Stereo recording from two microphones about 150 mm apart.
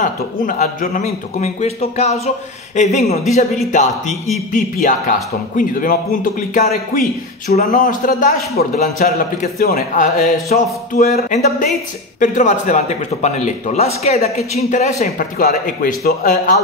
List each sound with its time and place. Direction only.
0.0 s a man's voice: 60° left (ahead or behind)
4.5 s a man's voice: 60° left (ahead or behind)
6.7 s a man's voice: 80° left
7.5 s a man's voice: 60° left (ahead or behind)
8.5 s a man's voice: 50° left (ahead or behind)
9.6 s a man's voice: 90° left
10.5 s a man's voice: 50° left (ahead or behind); by 16.5 s 70° left (ahead or behind)